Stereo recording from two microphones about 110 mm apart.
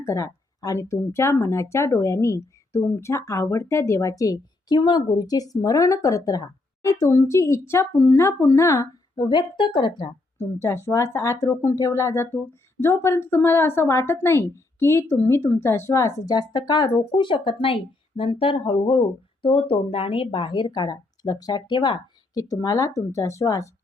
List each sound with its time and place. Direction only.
0.0 s a woman's voice: 30° left (ahead or behind)
10.3 s a woman's voice: 25° left (ahead or behind); by 22.0 s 45° left (ahead or behind)
22.4 s speech: 30° left (ahead or behind)